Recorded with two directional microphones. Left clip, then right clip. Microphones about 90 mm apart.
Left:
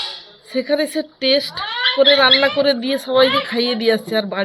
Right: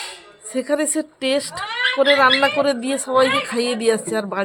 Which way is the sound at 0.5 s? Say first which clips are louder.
Left 2 dB; 40° right (ahead or behind).